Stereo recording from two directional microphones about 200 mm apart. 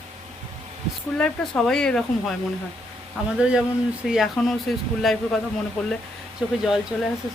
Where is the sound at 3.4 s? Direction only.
5° right (ahead or behind).